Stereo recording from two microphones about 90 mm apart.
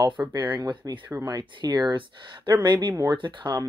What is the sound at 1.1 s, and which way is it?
Speech, 45° right (ahead or behind).